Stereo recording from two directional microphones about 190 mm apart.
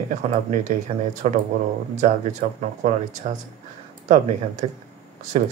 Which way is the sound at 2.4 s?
40° right (ahead or behind).